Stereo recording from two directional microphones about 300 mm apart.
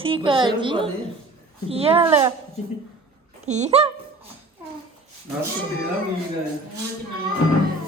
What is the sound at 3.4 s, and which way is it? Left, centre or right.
Speech, right.